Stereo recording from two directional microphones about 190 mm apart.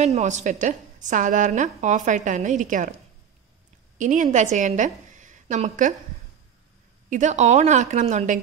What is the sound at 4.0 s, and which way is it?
A woman's voice, 40° right (ahead or behind).